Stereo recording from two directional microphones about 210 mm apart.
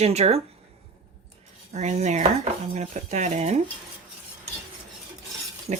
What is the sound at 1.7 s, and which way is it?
Speech, 30° right (ahead or behind).